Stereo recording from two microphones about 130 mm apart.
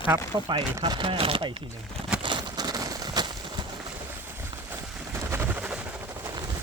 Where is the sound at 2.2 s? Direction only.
35° right (ahead or behind).